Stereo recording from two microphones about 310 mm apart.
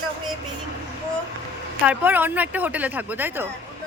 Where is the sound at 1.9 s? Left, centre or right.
Centre.